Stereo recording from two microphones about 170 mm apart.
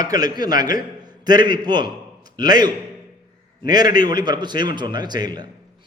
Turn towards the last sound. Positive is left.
turn(degrees=-25)  # may be behind; listen again after turning